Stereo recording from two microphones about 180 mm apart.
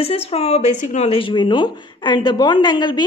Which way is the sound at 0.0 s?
35° left (ahead or behind).